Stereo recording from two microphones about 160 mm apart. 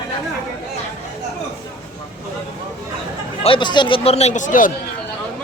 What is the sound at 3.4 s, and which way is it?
Speech, 30° left (ahead or behind).